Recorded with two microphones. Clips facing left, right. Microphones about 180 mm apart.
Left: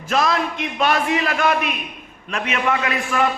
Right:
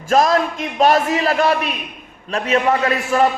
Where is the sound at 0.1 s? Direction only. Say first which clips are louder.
Right 5 dB; 45° right (ahead or behind).